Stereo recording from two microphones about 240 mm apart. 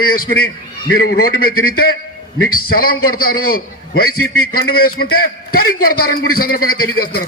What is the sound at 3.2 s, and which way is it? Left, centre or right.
Speech, left.